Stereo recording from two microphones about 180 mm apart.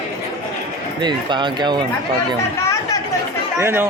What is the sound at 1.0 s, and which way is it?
Speech, 25° right (ahead or behind).